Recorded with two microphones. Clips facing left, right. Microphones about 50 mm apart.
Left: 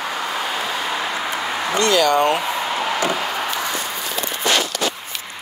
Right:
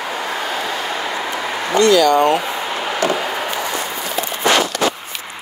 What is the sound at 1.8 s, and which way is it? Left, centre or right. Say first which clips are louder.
Speech: right 5 dB; left.